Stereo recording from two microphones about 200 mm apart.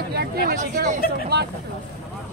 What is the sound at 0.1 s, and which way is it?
Speech, 50° right (ahead or behind).